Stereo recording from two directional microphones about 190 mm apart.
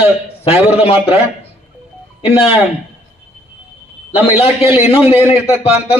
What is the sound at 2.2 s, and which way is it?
Speech, 30° left (ahead or behind).